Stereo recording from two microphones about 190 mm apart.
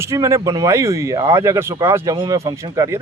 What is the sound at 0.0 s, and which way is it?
Speech, 15° right (ahead or behind).